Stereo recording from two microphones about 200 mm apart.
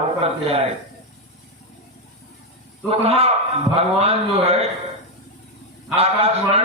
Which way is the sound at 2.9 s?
30° right (ahead or behind).